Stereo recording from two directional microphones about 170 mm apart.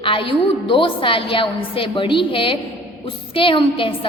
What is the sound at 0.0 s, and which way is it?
A woman's voice, 30° left (ahead or behind).